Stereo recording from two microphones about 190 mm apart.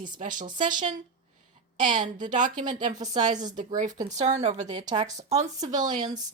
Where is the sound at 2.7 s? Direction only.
25° right (ahead or behind).